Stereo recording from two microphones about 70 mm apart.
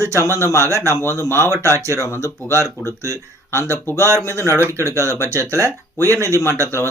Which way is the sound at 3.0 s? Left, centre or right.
Right.